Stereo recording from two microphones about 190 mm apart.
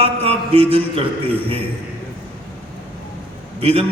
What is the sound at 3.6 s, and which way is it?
Speech, 30° right (ahead or behind).